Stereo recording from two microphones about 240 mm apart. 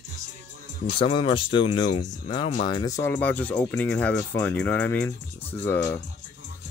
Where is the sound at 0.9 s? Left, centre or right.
Left.